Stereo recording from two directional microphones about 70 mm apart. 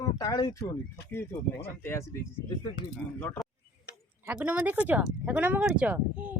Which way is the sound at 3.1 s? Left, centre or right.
Left.